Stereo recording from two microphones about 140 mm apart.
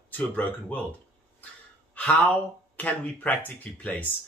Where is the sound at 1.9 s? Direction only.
10° left (ahead or behind).